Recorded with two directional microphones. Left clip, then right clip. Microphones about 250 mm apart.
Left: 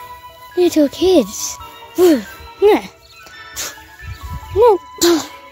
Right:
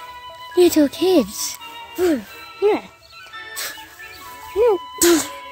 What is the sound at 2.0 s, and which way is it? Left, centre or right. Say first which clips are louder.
Speech: left 8 dB; centre.